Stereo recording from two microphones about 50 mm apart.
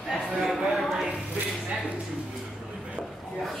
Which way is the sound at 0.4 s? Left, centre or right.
Centre.